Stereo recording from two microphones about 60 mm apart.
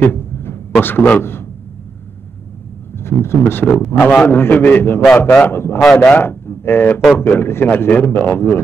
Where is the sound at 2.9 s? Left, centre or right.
Left.